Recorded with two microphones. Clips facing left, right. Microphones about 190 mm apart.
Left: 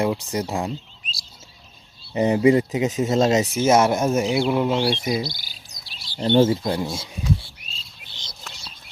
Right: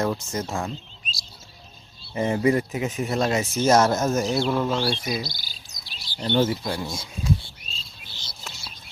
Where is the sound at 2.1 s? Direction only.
20° left (ahead or behind).